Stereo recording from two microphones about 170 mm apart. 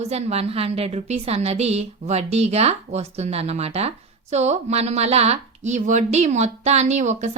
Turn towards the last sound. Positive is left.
turn(degrees=-45)  # may be behind; listen again after turning